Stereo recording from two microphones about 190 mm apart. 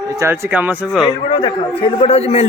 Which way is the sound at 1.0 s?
25° left (ahead or behind).